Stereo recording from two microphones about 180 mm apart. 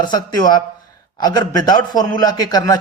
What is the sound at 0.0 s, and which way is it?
Speech, 25° left (ahead or behind).